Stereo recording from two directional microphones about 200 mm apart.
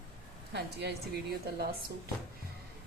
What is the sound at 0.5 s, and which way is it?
A woman's voice, 55° right (ahead or behind).